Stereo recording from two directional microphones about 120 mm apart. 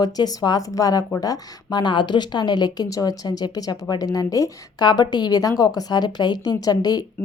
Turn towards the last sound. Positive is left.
turn(degrees=35)  # may be behind; listen again after turning